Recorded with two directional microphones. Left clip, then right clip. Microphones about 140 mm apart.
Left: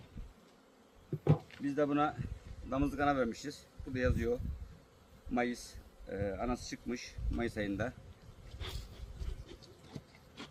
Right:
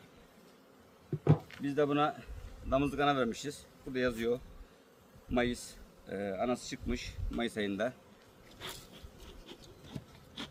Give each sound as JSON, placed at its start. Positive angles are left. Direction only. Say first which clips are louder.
{"t": 1.2, "sound": "bee", "louder": "right 2 dB", "side_deg": 5}
{"t": 1.6, "sound": "speech", "louder": "right 2 dB", "side_deg": -20}
{"t": 5.3, "sound": "speech", "louder": "right 3 dB", "side_deg": -30}
{"t": 8.5, "sound": "biting", "louder": "right 2 dB", "side_deg": 0}
{"t": 9.5, "sound": "insect", "louder": "right 4 dB", "side_deg": -5}